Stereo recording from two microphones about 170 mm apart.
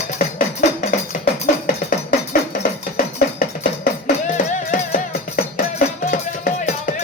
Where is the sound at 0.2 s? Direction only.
50° left (ahead or behind).